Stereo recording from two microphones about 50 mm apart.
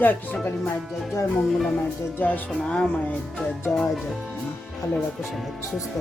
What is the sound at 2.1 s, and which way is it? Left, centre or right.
Speech, left.